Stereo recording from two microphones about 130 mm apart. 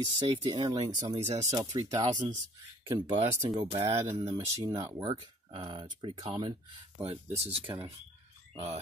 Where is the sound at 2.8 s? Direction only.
45° right (ahead or behind).